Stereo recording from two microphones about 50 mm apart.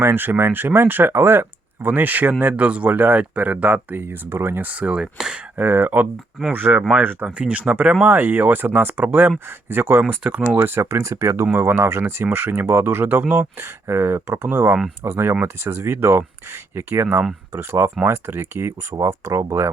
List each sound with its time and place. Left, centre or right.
0.0 s speech: right
1.9 s speech: right
2.9 s speech: right
3.9 s speech: right
4.6 s speech: right
5.1 s speech: centre
5.5 s speech: right
7.3 s speech: right
8.0 s speech: right
10.2 s speech: right
11.0 s speech: right
11.5 s speech: right
12.2 s speech: right